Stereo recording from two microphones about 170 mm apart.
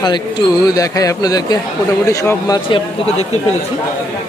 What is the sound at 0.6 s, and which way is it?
A man's voice, 20° left (ahead or behind).